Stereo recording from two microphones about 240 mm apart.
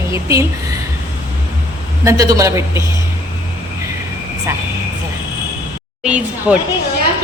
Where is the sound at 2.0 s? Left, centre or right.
Centre.